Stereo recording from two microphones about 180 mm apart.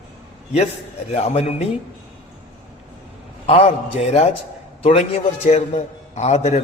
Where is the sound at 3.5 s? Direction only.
35° left (ahead or behind).